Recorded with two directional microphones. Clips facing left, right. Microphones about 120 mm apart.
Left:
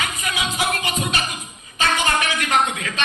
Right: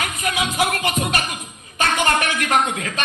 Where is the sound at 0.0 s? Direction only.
50° right (ahead or behind).